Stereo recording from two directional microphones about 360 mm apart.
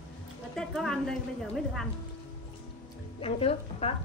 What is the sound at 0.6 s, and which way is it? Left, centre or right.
Speech, centre.